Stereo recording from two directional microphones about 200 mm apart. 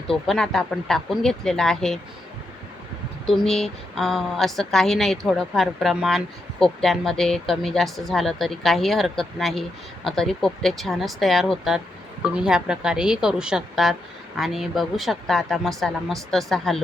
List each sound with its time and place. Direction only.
0.1 s a woman's voice: centre (ahead or behind)
3.2 s a woman's voice: 5° left (ahead or behind)